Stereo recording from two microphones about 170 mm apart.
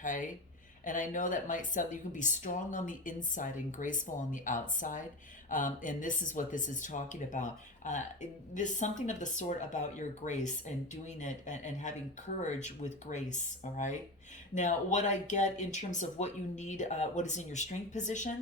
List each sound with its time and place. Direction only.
0.0 s speech: 50° left (ahead or behind)